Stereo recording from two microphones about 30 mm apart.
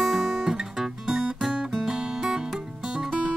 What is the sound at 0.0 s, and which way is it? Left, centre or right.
Guitar, centre.